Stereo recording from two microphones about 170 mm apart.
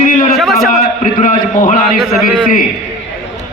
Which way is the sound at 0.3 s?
Centre (ahead or behind).